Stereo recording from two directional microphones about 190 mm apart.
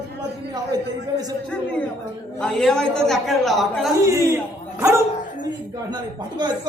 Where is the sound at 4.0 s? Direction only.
15° right (ahead or behind).